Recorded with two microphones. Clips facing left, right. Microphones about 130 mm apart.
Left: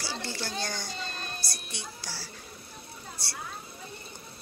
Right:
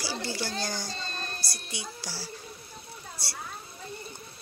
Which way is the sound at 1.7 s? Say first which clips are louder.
Right 2 dB; 10° right (ahead or behind).